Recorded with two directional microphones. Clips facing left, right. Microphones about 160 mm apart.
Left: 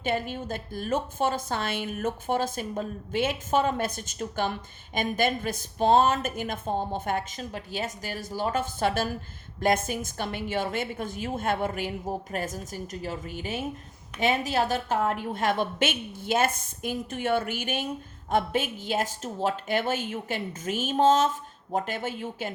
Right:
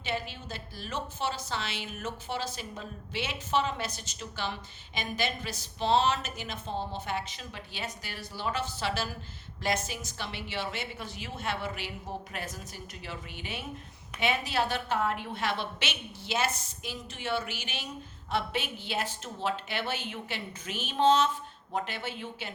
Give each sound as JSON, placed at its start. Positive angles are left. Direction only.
{"t": 0.0, "sound": "a woman's voice", "side_deg": 50}